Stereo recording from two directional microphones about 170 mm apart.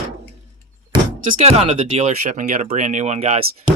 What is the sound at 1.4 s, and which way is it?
Speech, 35° right (ahead or behind).